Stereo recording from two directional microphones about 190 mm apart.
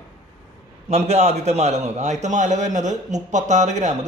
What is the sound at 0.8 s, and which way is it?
A man's voice, 35° right (ahead or behind).